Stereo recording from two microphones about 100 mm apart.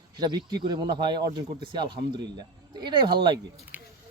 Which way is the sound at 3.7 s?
15° right (ahead or behind).